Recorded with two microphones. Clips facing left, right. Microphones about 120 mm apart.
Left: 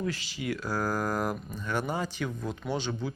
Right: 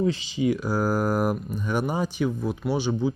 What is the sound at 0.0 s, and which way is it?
Speech, 20° right (ahead or behind).